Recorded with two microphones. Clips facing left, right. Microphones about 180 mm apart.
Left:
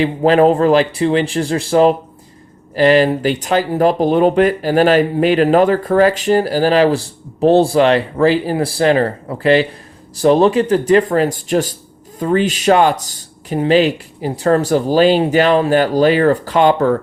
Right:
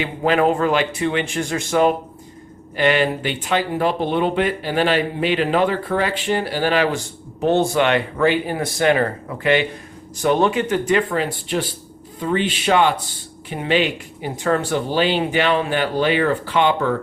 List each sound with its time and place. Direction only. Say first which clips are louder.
0.0 s speech: left 7 dB; 35° left (ahead or behind)